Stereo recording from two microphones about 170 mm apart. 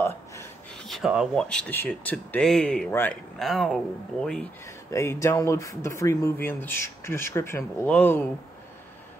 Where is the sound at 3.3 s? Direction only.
Centre (ahead or behind).